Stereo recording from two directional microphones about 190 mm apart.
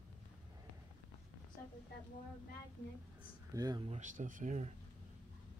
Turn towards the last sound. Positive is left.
turn(degrees=-40)  # may be behind; listen again after turning